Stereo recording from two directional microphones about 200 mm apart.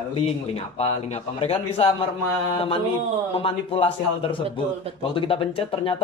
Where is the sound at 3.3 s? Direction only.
30° left (ahead or behind).